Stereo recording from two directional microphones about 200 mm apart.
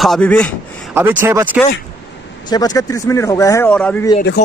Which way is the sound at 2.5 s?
20° left (ahead or behind).